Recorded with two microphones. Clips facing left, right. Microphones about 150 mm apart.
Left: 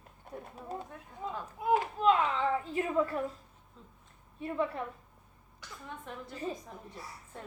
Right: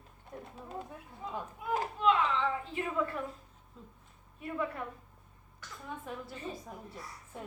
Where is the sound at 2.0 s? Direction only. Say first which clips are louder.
Right 2 dB; 40° left (ahead or behind).